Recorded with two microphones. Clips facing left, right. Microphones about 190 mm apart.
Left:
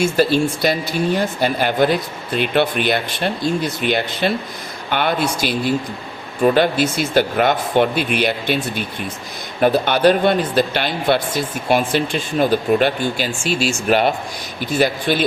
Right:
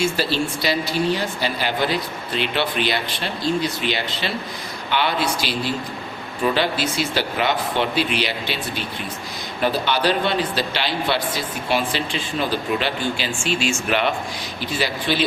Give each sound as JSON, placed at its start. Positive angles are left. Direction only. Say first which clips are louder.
{"t": 0.0, "sound": "speech", "louder": "left 6 dB", "side_deg": 50}